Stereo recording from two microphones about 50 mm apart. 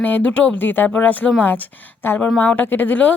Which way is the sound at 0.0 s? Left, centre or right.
Left.